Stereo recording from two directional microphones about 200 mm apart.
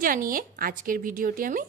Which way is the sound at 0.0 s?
45° right (ahead or behind).